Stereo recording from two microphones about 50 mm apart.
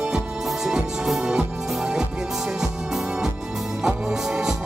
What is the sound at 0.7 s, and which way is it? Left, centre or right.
Music, centre.